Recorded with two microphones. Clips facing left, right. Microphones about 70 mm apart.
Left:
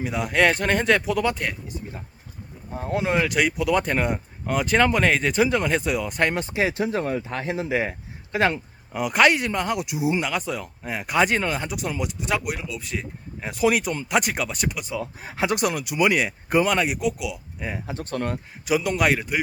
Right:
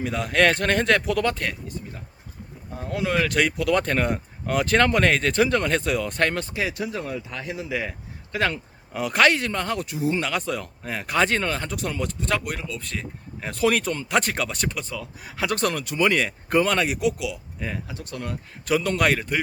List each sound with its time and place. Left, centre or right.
0.0 s speech: centre
1.6 s a sound: centre
2.7 s speech: left
3.2 s speech: centre
6.3 s speech: left
8.9 s speech: centre
14.9 s speech: left
15.4 s speech: centre
17.8 s speech: left
18.6 s speech: centre